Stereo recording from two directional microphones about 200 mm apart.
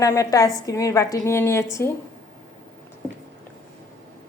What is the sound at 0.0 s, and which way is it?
A woman's voice, 15° left (ahead or behind).